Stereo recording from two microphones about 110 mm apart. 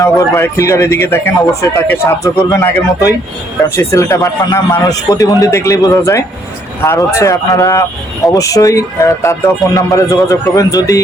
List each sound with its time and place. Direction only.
0.0 s speech: 25° left (ahead or behind)